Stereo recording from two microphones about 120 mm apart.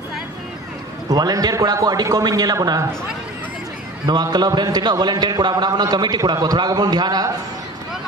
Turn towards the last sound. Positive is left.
turn(degrees=-35)  # may be behind; listen again after turning